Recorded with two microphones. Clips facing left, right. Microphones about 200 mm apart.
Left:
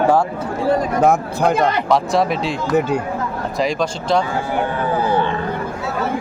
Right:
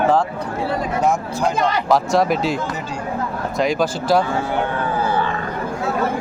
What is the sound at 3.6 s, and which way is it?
Speech, 5° right (ahead or behind).